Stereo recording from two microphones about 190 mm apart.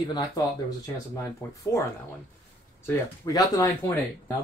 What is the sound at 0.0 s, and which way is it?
Speech, 20° left (ahead or behind).